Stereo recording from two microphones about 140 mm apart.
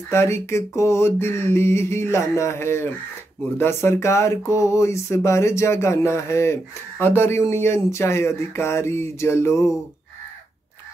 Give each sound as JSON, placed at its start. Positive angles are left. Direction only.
{"t": 0.1, "sound": "speech", "side_deg": 20}